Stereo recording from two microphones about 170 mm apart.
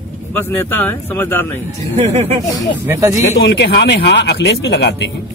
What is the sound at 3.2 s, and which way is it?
Speech, 90° left.